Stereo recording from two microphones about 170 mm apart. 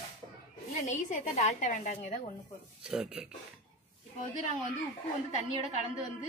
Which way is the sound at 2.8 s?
5° right (ahead or behind).